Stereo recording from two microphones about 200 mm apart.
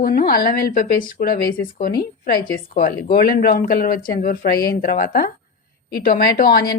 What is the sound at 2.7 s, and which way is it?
Speech, 45° left (ahead or behind).